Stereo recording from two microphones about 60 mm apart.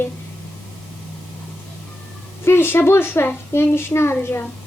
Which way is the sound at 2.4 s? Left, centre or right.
Left.